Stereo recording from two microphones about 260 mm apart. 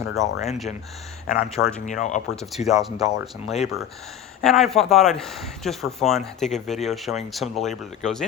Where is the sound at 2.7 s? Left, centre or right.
Centre.